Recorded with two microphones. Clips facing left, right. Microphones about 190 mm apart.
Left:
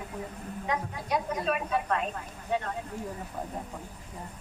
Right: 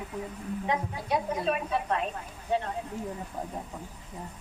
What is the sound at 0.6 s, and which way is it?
A man's voice, 30° right (ahead or behind).